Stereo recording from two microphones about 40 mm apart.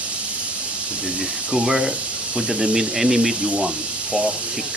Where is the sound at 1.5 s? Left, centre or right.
Centre.